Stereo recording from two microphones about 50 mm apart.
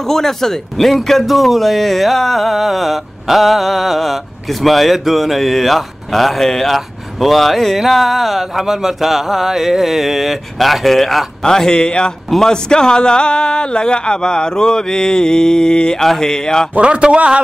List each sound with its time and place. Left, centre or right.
0.0 s speech: centre
11.4 s speech: centre
16.7 s speech: right